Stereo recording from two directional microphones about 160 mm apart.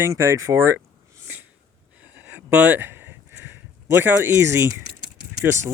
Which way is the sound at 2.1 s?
10° right (ahead or behind).